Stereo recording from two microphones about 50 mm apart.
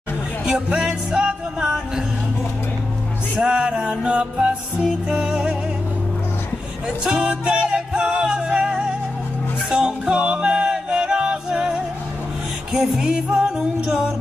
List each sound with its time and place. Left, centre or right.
0.5 s music: centre
3.4 s music: right
7.1 s music: centre
12.9 s music: centre